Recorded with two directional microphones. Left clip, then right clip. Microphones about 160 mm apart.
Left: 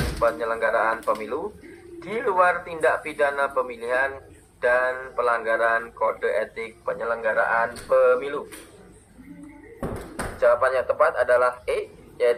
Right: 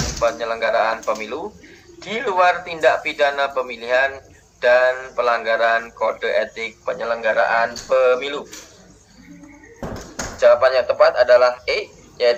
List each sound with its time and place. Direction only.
0.2 s speech: 30° right (ahead or behind)
10.4 s speech: 35° right (ahead or behind)